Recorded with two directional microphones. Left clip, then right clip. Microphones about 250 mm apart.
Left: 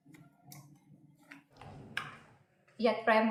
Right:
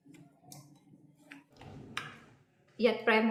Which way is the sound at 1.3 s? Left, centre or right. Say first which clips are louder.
Right 1 dB; centre.